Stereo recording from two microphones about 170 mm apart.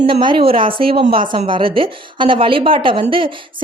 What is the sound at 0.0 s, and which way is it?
A woman's voice, 30° right (ahead or behind).